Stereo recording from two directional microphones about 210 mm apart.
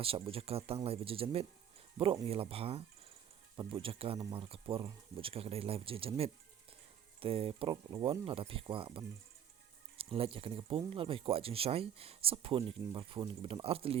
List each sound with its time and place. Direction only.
0.0 s speech: 25° right (ahead or behind)